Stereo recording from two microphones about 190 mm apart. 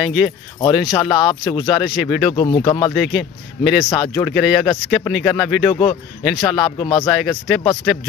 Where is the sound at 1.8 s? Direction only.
Centre (ahead or behind).